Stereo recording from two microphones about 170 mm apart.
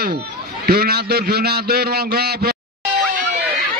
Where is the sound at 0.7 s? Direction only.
70° right (ahead or behind).